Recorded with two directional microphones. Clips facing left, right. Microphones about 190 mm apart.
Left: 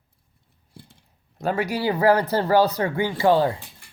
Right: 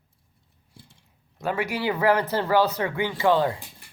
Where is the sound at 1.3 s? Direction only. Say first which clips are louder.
Left 3 dB; 40° left (ahead or behind).